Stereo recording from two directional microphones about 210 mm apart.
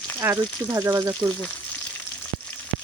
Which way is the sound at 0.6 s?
20° right (ahead or behind).